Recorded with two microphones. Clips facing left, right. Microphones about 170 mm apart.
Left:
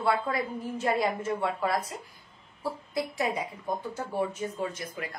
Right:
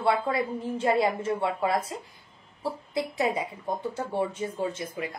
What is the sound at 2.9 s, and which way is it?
A woman's voice, 25° right (ahead or behind).